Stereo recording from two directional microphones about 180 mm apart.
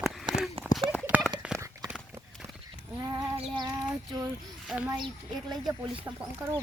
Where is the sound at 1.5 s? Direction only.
15° right (ahead or behind).